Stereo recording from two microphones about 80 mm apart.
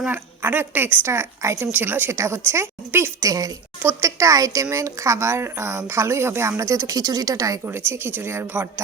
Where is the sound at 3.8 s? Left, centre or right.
Right.